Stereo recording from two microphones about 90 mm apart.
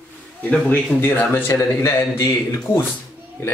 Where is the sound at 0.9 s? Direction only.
25° left (ahead or behind).